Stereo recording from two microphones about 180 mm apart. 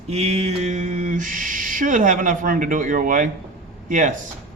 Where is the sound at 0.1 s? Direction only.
35° right (ahead or behind).